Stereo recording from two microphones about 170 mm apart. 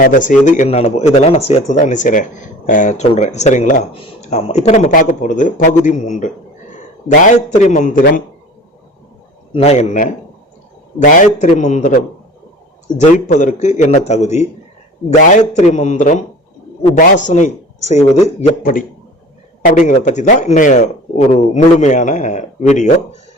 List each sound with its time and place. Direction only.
0.0 s a man's voice: 50° left (ahead or behind)
9.5 s a man's voice: 35° left (ahead or behind)